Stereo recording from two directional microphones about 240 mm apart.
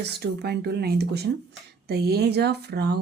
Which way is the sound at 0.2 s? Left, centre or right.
Right.